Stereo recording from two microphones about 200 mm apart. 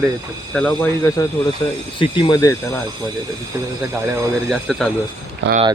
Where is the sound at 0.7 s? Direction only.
15° left (ahead or behind).